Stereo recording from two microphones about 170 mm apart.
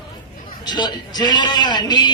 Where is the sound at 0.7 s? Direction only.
25° left (ahead or behind).